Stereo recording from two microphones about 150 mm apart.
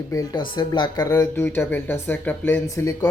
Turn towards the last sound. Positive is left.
turn(degrees=20)  # may be behind; listen again after turning